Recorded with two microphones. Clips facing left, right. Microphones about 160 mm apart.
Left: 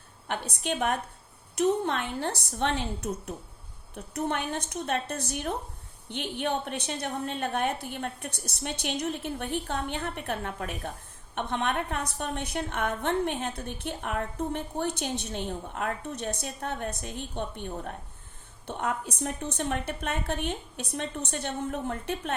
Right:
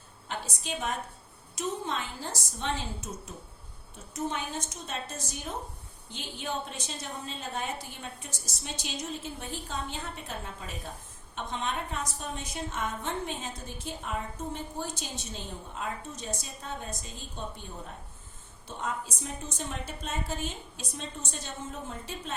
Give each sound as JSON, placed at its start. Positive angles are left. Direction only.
{"t": 0.3, "sound": "a woman's voice", "side_deg": 60}